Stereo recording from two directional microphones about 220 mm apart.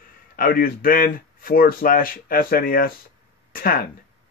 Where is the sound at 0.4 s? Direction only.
40° left (ahead or behind).